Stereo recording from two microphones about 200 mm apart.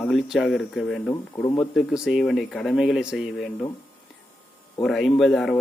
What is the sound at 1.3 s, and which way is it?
Speech, 15° left (ahead or behind).